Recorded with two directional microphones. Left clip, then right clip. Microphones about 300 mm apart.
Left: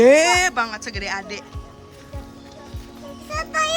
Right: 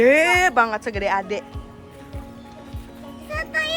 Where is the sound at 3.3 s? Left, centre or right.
Centre.